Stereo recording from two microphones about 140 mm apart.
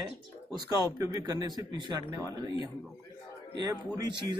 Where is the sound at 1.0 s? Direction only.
25° right (ahead or behind).